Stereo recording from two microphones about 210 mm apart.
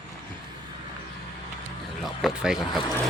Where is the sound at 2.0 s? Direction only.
Centre (ahead or behind).